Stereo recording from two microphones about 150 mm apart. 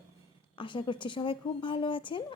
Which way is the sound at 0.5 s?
35° left (ahead or behind).